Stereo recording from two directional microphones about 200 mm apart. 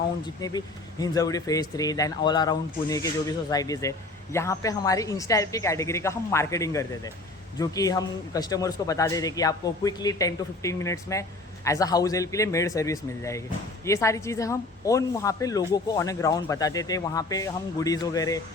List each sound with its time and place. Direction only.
0.4 s speech: 20° left (ahead or behind)